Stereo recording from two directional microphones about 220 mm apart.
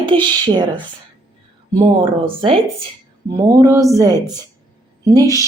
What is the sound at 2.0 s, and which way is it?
Speech, 25° right (ahead or behind).